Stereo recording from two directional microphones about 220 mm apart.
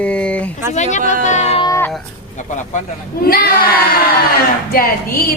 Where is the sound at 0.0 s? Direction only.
5° left (ahead or behind).